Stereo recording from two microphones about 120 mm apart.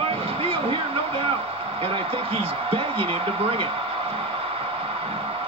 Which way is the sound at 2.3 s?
50° right (ahead or behind).